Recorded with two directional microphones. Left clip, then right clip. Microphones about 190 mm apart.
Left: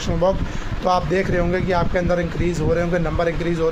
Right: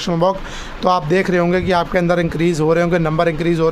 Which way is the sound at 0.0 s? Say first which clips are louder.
Right 3 dB; 45° right (ahead or behind).